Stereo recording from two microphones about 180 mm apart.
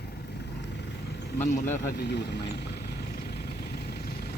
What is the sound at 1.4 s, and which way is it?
Speech, 10° left (ahead or behind).